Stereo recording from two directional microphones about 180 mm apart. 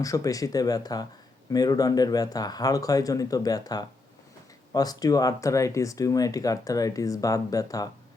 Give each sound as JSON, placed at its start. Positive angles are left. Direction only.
{"t": 0.0, "sound": "speech", "side_deg": 20}